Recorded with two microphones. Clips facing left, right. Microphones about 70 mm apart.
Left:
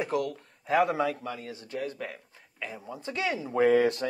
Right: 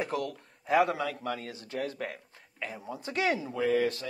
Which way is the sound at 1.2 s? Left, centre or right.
Right.